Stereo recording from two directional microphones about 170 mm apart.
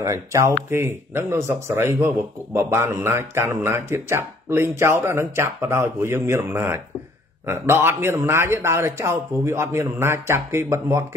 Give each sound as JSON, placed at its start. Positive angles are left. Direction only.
{"t": 0.0, "sound": "speech", "side_deg": -20}